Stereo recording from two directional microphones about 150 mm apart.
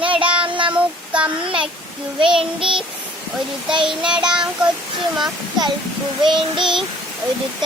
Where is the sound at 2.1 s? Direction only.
35° right (ahead or behind).